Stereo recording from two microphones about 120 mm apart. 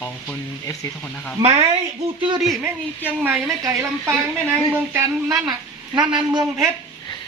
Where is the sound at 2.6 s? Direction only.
15° right (ahead or behind).